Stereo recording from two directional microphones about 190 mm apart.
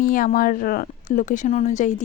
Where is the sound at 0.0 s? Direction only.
45° left (ahead or behind).